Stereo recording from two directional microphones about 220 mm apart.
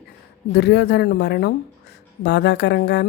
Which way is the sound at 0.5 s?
50° left (ahead or behind).